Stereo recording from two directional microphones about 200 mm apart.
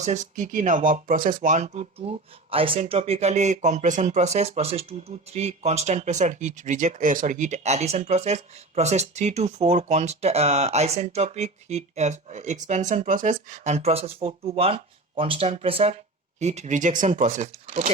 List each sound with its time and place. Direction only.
0.0 s speech: 35° right (ahead or behind)